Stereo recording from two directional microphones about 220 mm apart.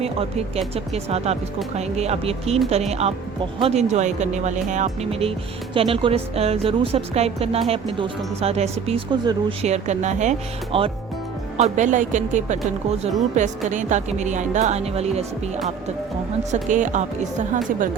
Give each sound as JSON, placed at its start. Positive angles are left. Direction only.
{"t": 0.0, "sound": "speech", "side_deg": -25}
{"t": 16.6, "sound": "speech", "side_deg": -35}